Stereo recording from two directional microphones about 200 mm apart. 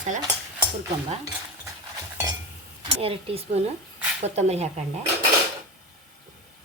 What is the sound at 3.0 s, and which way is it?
Speech, 30° right (ahead or behind).